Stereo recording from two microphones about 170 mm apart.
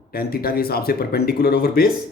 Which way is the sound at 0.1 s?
65° left (ahead or behind).